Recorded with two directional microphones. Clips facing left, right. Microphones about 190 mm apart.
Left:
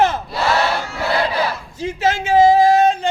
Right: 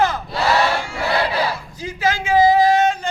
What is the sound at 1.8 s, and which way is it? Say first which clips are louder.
Speech: left 4 dB; 25° left (ahead or behind).